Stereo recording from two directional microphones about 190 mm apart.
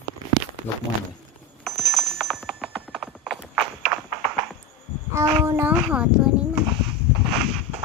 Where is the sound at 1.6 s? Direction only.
Centre (ahead or behind).